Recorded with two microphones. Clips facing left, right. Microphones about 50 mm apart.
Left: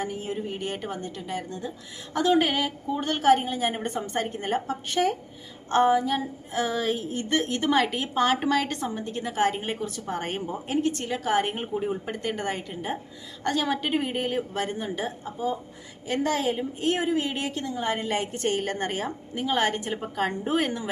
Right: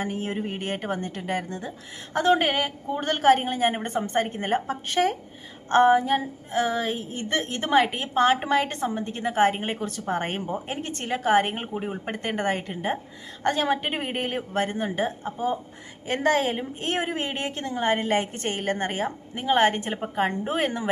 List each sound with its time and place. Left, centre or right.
0.0 s a woman's voice: right
2.1 s a woman's voice: right
12.1 s a woman's voice: right